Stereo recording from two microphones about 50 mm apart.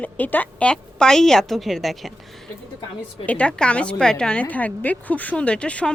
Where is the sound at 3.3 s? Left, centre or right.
Left.